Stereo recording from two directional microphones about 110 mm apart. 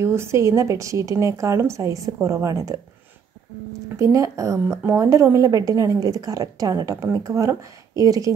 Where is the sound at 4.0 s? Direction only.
30° right (ahead or behind).